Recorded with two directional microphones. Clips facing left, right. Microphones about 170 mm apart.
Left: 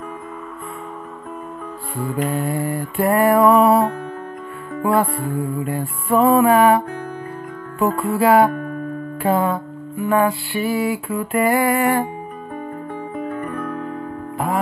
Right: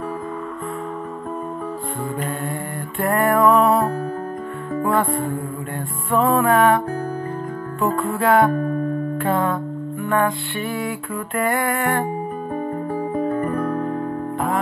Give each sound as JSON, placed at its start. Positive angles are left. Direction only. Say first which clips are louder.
{"t": 2.1, "sound": "music", "louder": "left 5 dB", "side_deg": 5}
{"t": 4.8, "sound": "music", "louder": "left 2 dB", "side_deg": 0}
{"t": 7.8, "sound": "music", "louder": "left 3 dB", "side_deg": 0}
{"t": 12.9, "sound": "music", "louder": "right 5 dB", "side_deg": -35}